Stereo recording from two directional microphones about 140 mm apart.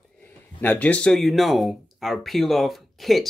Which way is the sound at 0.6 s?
10° left (ahead or behind).